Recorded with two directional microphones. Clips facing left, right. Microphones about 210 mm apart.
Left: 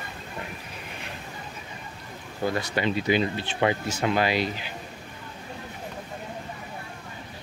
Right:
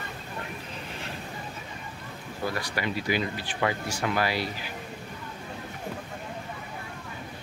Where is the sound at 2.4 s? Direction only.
25° left (ahead or behind).